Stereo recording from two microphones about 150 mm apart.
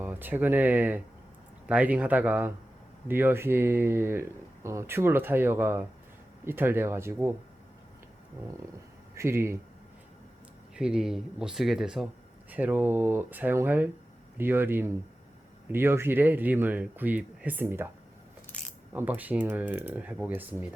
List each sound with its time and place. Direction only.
0.0 s speech: 10° right (ahead or behind)
9.1 s speech: 15° right (ahead or behind)
10.8 s speech: 5° right (ahead or behind)
18.9 s speech: 10° right (ahead or behind)